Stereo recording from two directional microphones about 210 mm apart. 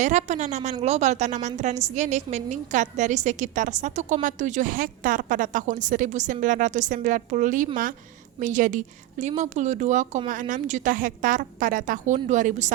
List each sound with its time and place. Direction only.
0.0 s a woman's voice: 35° right (ahead or behind)